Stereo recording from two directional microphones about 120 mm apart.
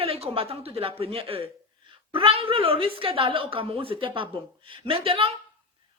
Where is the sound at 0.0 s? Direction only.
55° right (ahead or behind).